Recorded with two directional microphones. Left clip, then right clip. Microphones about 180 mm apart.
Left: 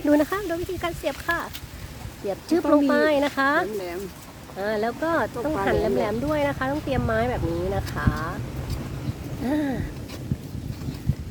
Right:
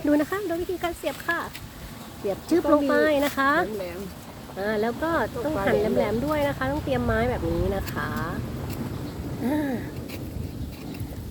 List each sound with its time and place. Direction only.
0.0 s speech: 15° left (ahead or behind)
9.4 s speech: 10° left (ahead or behind)